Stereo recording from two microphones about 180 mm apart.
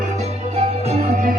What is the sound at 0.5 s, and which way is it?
Music, 35° right (ahead or behind).